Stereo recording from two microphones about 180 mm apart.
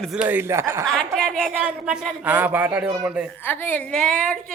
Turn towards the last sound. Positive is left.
turn(degrees=5)  # may be behind; listen again after turning